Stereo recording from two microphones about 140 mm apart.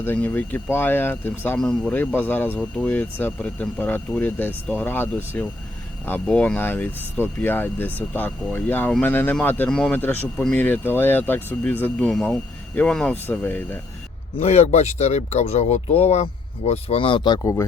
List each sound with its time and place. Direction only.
0.0 s speech: 15° left (ahead or behind)
14.3 s speech: 50° left (ahead or behind); by 17.7 s 25° left (ahead or behind)